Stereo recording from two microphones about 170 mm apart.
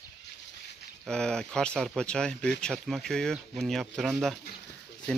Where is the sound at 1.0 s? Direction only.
5° left (ahead or behind).